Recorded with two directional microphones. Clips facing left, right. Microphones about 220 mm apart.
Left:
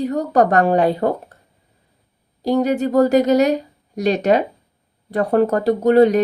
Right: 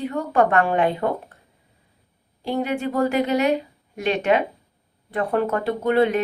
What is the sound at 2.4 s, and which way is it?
Speech, 40° left (ahead or behind).